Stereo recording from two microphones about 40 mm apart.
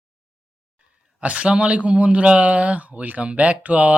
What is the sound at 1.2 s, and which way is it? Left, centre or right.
Speech, right.